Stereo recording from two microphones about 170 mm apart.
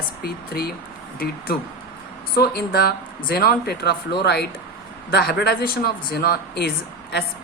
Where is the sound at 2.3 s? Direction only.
70° left (ahead or behind).